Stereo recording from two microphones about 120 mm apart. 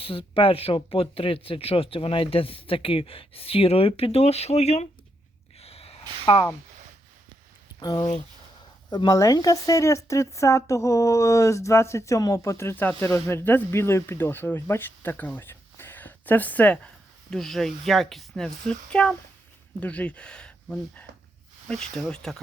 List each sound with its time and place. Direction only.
0.0 s speech: 50° left (ahead or behind); by 4.9 s 65° left (ahead or behind)
5.5 s snort: 60° left (ahead or behind)
6.2 s speech: 50° left (ahead or behind)
7.8 s speech: 35° left (ahead or behind); by 15.3 s 15° left (ahead or behind)
15.4 s a sound: 20° left (ahead or behind)
17.3 s speech: 5° left (ahead or behind)